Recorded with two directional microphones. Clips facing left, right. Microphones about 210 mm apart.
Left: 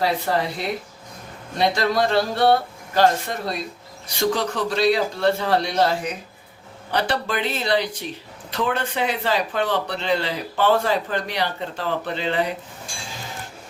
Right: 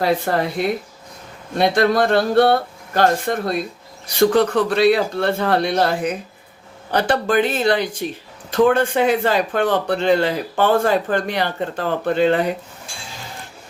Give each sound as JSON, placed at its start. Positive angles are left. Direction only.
{"t": 0.0, "sound": "speech", "side_deg": -55}
{"t": 1.5, "sound": "speech", "side_deg": -55}